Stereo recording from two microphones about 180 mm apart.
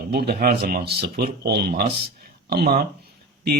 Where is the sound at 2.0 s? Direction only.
60° right (ahead or behind).